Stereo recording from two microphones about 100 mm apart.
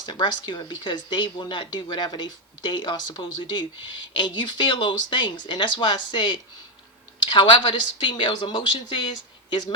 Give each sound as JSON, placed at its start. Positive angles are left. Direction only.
{"t": 0.0, "sound": "speech", "side_deg": 50}